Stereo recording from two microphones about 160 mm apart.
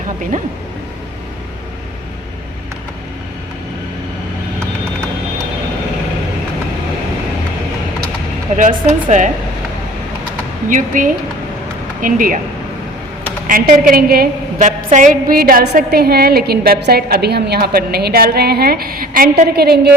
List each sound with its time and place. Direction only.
8.5 s a woman's voice: 50° right (ahead or behind)
10.7 s a woman's voice: 55° right (ahead or behind)
13.5 s a woman's voice: 60° right (ahead or behind)
14.8 s a woman's voice: 50° right (ahead or behind); by 19.9 s 80° right